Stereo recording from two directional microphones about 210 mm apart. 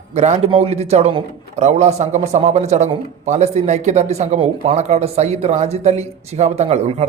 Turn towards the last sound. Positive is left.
turn(degrees=-30)  # may be behind; listen again after turning